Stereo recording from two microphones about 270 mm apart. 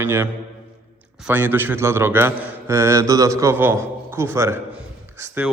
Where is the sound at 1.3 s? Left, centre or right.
Centre.